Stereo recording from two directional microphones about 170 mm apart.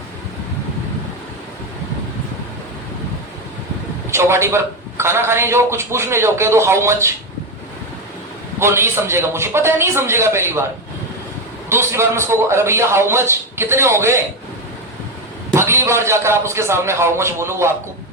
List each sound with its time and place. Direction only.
4.1 s a man's voice: 15° right (ahead or behind)
8.5 s a man's voice: 15° right (ahead or behind)
11.7 s a man's voice: 15° right (ahead or behind)
15.5 s a man's voice: 15° right (ahead or behind)